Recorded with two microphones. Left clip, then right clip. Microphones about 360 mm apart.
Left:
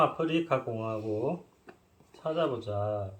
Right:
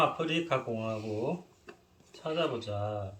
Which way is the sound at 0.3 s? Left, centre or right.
Left.